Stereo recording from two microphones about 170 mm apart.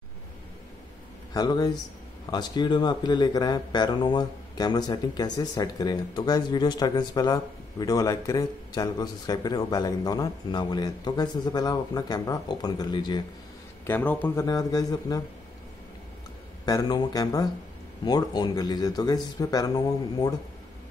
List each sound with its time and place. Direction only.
1.3 s speech: 25° left (ahead or behind)
13.8 s speech: 10° left (ahead or behind)
16.6 s speech: 25° left (ahead or behind)